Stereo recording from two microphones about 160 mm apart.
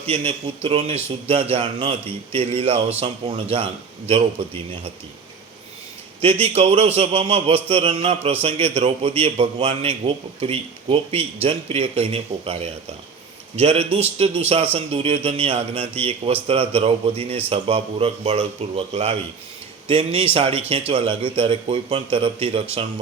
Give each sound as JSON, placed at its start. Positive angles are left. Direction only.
{"t": 0.0, "sound": "a man's voice", "side_deg": -40}
{"t": 6.2, "sound": "a man's voice", "side_deg": -40}